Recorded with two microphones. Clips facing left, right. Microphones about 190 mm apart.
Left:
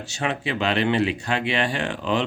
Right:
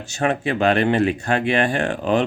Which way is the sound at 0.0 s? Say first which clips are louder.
Right 5 dB; 50° right (ahead or behind).